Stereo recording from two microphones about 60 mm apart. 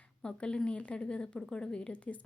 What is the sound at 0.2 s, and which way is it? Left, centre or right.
A woman's voice, centre.